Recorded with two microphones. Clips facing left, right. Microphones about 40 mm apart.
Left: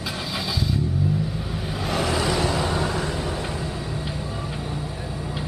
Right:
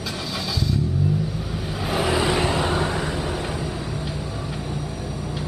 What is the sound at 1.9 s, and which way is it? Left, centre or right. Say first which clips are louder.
Vehicle: right 2 dB; centre.